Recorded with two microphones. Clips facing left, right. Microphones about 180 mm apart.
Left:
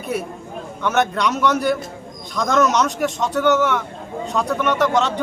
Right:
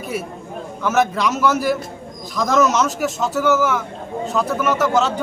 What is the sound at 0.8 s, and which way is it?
A man's voice, centre (ahead or behind).